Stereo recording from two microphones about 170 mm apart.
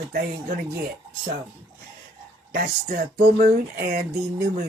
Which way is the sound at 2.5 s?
50° right (ahead or behind).